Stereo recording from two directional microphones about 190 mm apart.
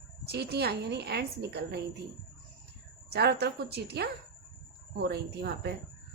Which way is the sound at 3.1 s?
60° right (ahead or behind).